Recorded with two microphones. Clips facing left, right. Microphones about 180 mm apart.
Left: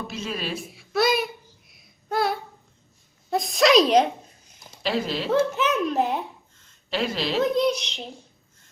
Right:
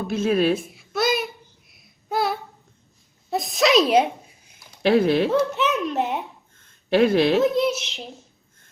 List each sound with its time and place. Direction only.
0.1 s a woman's voice: 55° right (ahead or behind)
0.7 s child singing: centre (ahead or behind)
3.2 s a sound: centre (ahead or behind)
4.8 s speech: 55° right (ahead or behind)
5.5 s speech: centre (ahead or behind)
6.6 s a sound: 55° right (ahead or behind)
7.3 s speech: centre (ahead or behind)